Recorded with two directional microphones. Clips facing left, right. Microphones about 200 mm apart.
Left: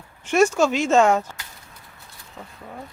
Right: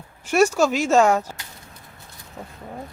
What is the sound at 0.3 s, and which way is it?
Speech, 5° right (ahead or behind).